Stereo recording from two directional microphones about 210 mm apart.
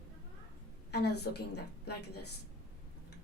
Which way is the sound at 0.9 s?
50° left (ahead or behind).